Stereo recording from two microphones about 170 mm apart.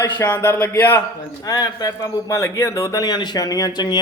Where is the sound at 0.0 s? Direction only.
15° left (ahead or behind).